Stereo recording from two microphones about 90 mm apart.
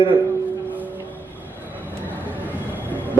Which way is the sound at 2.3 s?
20° right (ahead or behind).